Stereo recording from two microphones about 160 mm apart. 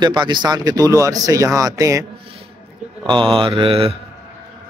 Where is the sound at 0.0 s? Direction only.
25° right (ahead or behind).